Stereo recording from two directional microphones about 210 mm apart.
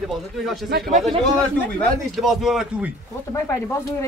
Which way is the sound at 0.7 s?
45° right (ahead or behind).